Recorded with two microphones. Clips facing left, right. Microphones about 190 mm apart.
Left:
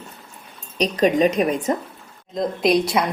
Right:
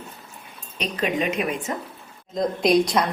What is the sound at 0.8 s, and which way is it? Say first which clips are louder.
Speech: left 8 dB; 35° left (ahead or behind).